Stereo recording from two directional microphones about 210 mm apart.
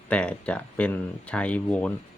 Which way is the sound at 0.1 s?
5° left (ahead or behind).